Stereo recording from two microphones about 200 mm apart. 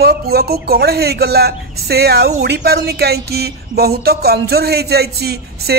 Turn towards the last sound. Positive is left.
turn(degrees=-55)  # may be behind; listen again after turning